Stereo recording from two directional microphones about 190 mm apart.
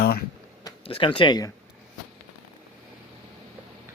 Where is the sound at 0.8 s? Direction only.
25° left (ahead or behind).